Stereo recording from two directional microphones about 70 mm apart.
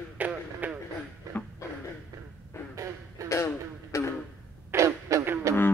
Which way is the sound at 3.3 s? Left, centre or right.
Left.